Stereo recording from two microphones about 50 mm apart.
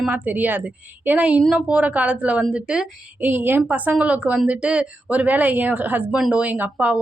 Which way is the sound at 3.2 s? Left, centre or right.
Right.